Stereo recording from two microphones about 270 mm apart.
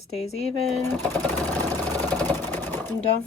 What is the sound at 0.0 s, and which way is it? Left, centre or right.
Speech, left.